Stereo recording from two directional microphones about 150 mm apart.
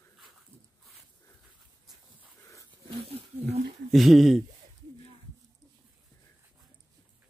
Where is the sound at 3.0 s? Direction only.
45° right (ahead or behind).